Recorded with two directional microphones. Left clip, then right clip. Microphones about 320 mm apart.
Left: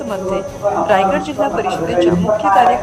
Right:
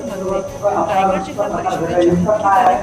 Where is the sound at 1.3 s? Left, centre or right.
Centre.